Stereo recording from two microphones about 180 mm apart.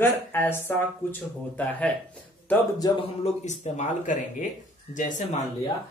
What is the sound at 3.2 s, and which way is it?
Speech, 40° left (ahead or behind).